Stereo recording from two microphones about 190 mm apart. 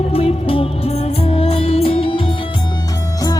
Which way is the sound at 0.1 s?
30° left (ahead or behind).